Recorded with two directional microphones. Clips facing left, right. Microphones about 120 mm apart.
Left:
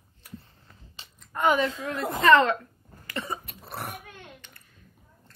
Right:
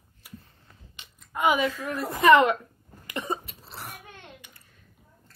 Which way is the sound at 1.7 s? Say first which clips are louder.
Left 1 dB; 25° left (ahead or behind).